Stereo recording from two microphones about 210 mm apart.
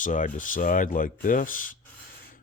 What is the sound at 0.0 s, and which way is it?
Speech, 40° left (ahead or behind).